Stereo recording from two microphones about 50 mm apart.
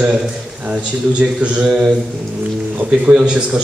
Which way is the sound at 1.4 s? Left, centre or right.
Right.